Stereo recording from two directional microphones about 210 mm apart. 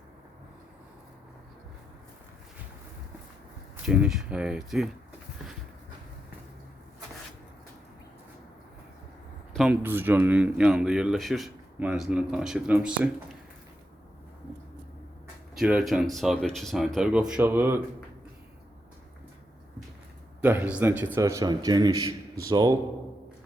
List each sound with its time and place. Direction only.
3.8 s speech: 5° right (ahead or behind)
9.5 s a sound: centre (ahead or behind)
9.8 s speech: 10° right (ahead or behind)
15.5 s speech: 5° right (ahead or behind)
20.4 s a man's voice: 10° right (ahead or behind)